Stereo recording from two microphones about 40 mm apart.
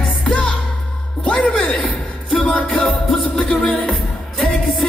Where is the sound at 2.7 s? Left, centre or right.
Centre.